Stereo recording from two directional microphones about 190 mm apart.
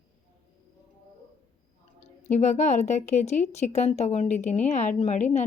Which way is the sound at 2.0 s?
35° left (ahead or behind).